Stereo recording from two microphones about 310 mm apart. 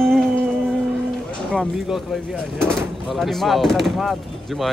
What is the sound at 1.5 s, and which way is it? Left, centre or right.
Speech, centre.